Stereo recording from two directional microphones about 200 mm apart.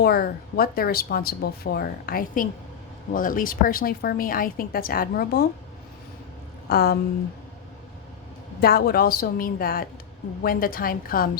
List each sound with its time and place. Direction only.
0.0 s speech: 50° left (ahead or behind)
6.7 s speech: 50° left (ahead or behind)
8.6 s speech: 50° left (ahead or behind)